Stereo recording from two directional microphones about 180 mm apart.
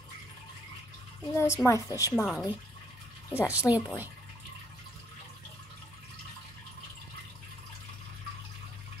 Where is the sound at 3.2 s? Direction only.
15° left (ahead or behind).